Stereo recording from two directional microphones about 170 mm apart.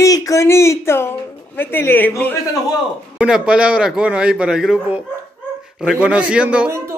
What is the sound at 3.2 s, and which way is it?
A man's voice, 5° right (ahead or behind).